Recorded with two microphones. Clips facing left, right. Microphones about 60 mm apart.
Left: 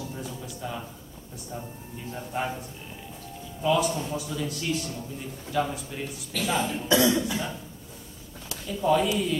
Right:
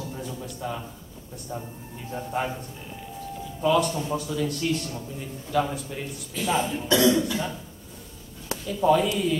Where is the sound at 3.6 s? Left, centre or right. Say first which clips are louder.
Right 2 dB; centre.